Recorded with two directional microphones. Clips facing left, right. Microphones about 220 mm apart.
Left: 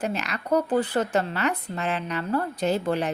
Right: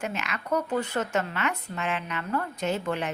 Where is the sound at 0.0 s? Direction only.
35° left (ahead or behind).